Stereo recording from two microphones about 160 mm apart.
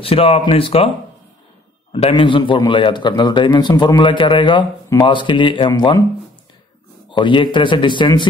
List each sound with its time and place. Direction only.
0.0 s speech: 35° left (ahead or behind)
1.9 s a man's voice: 35° left (ahead or behind)
7.1 s a man's voice: 30° left (ahead or behind)